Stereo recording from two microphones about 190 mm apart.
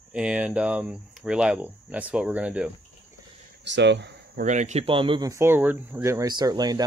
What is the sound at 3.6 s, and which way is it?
Speech, 65° right (ahead or behind).